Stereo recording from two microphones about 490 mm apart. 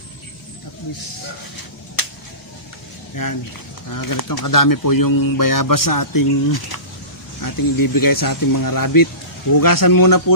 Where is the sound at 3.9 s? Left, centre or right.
Left.